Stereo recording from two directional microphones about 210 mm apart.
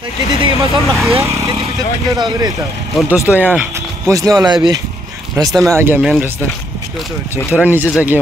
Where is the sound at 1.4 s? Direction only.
20° right (ahead or behind).